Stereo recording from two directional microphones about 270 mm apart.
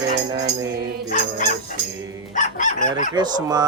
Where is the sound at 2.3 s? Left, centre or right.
Left.